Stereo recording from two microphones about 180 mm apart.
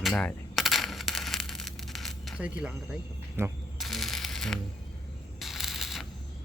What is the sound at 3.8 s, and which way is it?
Music, centre (ahead or behind).